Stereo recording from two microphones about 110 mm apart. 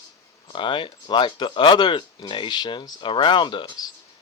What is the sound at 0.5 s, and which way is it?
Speech, 50° left (ahead or behind).